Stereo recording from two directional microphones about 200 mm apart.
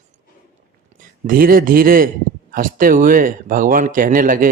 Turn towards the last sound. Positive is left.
turn(degrees=-45)  # may be behind; listen again after turning